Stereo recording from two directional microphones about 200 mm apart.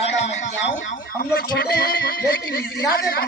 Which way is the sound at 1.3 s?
50° left (ahead or behind).